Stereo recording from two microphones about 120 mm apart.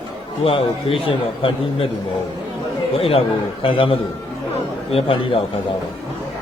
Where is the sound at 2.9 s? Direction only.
50° left (ahead or behind).